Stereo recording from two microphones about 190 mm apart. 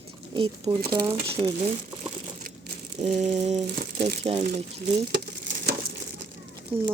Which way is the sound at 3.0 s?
35° right (ahead or behind).